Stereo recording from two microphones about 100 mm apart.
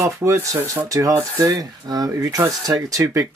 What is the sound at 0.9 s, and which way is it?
Speech, 35° right (ahead or behind).